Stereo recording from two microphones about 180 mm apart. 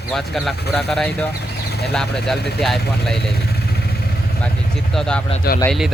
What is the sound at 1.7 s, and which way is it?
Speech, 65° left (ahead or behind).